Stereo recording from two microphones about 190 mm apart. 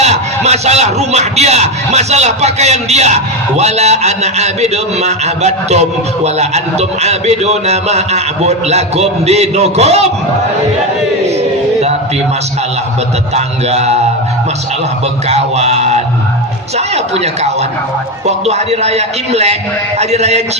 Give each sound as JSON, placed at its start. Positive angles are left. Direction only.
{"t": 0.0, "sound": "a man's voice", "side_deg": -35}
{"t": 13.3, "sound": "a man's voice", "side_deg": -35}
{"t": 15.3, "sound": "a man's voice", "side_deg": -35}